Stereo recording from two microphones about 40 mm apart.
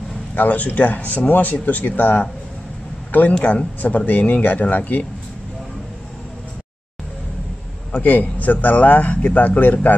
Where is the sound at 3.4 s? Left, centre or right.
Left.